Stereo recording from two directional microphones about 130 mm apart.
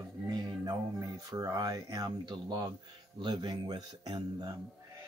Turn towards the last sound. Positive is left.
turn(degrees=-30)  # may be behind; listen again after turning